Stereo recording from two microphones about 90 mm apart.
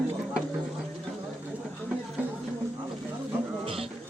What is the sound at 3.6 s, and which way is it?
Music, 90° right.